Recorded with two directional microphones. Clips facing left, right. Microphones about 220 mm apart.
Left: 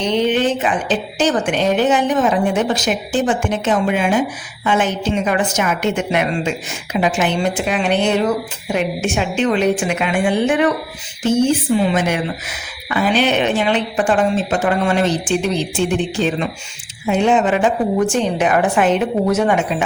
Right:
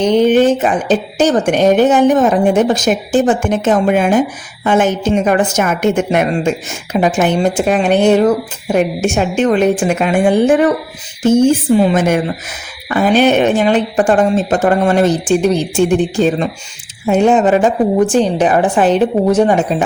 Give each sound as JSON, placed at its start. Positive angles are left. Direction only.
{"t": 0.0, "sound": "a woman's voice", "side_deg": -45}